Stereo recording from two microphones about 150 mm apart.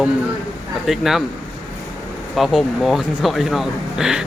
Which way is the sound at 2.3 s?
Centre (ahead or behind).